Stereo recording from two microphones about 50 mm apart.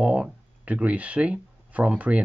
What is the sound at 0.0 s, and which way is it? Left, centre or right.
Speech, right.